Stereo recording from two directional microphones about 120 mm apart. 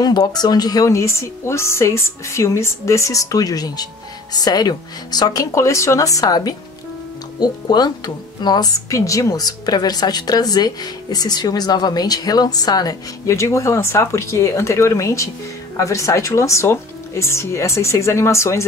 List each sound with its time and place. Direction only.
0.0 s a woman's voice: 35° left (ahead or behind)